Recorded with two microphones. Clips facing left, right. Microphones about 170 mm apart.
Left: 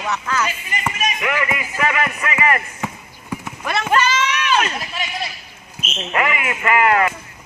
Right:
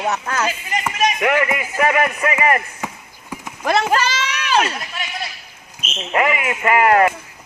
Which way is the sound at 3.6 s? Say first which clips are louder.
Right 1 dB; 35° right (ahead or behind).